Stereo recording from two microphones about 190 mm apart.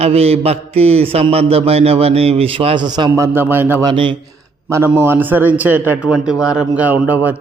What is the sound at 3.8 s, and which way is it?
Speech, 25° right (ahead or behind).